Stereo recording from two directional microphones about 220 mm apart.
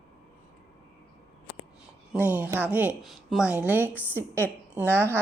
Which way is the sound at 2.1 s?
5° right (ahead or behind).